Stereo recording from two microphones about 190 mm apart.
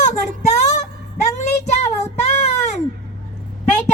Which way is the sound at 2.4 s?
35° left (ahead or behind).